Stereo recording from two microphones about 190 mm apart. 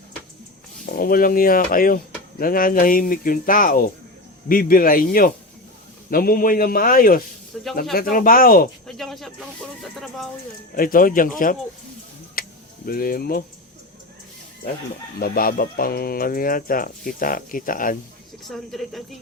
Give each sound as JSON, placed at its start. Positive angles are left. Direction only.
{"t": 0.9, "sound": "speech", "side_deg": 50}
{"t": 7.5, "sound": "speech", "side_deg": 0}
{"t": 7.9, "sound": "speech", "side_deg": 45}
{"t": 8.9, "sound": "speech", "side_deg": 0}
{"t": 10.8, "sound": "speech", "side_deg": 45}
{"t": 12.4, "sound": "tick-tock", "side_deg": 50}
{"t": 15.2, "sound": "speech", "side_deg": 50}
{"t": 18.4, "sound": "speech", "side_deg": 0}